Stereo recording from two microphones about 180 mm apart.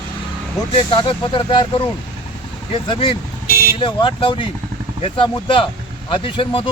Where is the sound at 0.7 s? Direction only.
30° left (ahead or behind).